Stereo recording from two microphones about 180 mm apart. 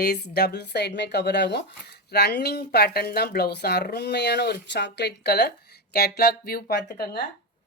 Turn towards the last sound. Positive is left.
turn(degrees=65)  # may be behind; listen again after turning